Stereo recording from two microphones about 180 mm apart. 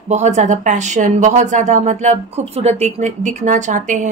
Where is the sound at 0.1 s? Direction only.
40° right (ahead or behind).